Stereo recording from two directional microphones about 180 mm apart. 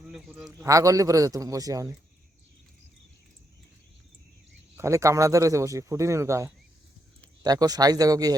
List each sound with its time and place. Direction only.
0.1 s a man's voice: 5° right (ahead or behind)
0.6 s speech: 15° right (ahead or behind)
4.8 s speech: 15° right (ahead or behind)